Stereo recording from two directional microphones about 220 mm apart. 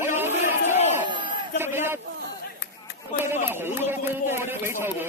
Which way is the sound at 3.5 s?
10° right (ahead or behind).